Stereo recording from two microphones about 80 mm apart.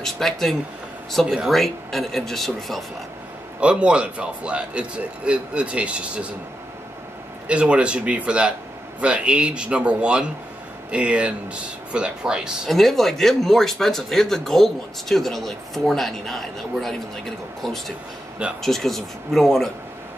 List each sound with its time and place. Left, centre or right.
0.0 s speech: centre
1.2 s speech: centre
1.5 s speech: centre
3.6 s speech: centre
7.4 s speech: centre
12.6 s speech: centre